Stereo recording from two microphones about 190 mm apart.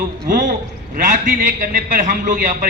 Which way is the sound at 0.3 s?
45° right (ahead or behind).